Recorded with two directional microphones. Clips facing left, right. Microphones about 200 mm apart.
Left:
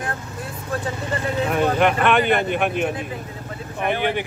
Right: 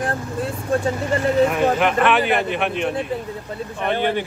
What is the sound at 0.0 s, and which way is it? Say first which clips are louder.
Vehicle: right 6 dB; 30° right (ahead or behind).